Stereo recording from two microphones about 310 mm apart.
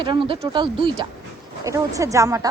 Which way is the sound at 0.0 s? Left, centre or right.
Centre.